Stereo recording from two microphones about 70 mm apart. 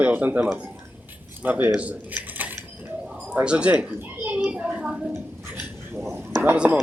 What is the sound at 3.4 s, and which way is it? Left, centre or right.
Speech, centre.